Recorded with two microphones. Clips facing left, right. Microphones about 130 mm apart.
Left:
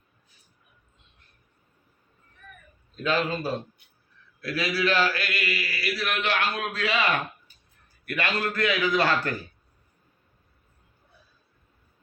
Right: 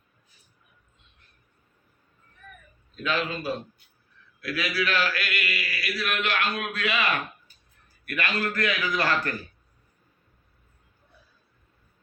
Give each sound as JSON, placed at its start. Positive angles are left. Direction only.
{"t": 2.9, "sound": "a man's voice", "side_deg": 35}
{"t": 8.0, "sound": "a man's voice", "side_deg": 25}